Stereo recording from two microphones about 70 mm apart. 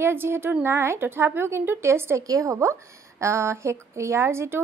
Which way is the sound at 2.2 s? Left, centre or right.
Right.